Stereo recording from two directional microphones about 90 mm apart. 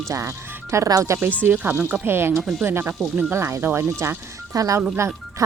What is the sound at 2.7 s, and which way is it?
Speech, 25° right (ahead or behind).